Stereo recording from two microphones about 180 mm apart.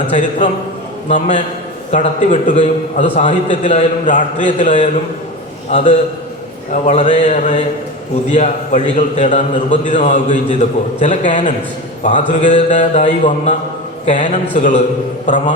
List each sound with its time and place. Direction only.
0.1 s a man's voice: 45° left (ahead or behind)